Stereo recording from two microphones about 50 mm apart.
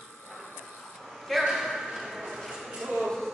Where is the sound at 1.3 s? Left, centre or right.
Centre.